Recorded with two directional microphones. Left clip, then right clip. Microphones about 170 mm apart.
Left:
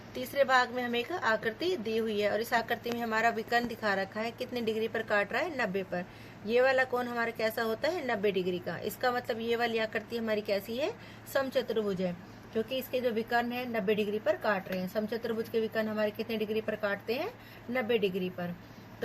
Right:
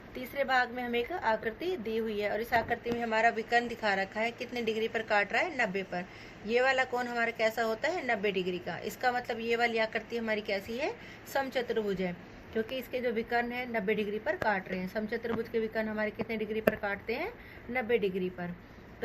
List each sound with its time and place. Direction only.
0.2 s a woman's voice: 55° left (ahead or behind)
17.7 s a woman's voice: 50° left (ahead or behind)